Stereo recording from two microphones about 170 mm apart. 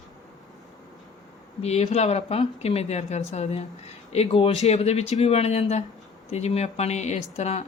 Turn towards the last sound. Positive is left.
turn(degrees=40)  # may be behind; listen again after turning